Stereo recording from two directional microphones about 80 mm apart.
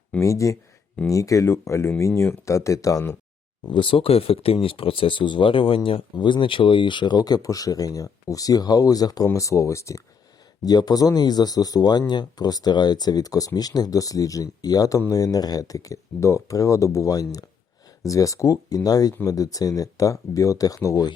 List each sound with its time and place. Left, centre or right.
0.2 s speech: left
3.7 s speech: left
10.7 s speech: left